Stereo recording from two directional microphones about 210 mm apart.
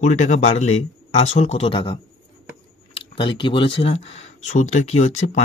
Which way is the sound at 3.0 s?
25° left (ahead or behind).